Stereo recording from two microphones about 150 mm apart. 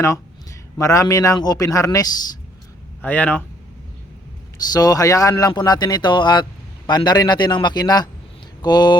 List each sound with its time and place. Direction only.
0.8 s speech: 20° left (ahead or behind)
3.0 s speech: 10° left (ahead or behind)
4.7 s speech: 25° left (ahead or behind)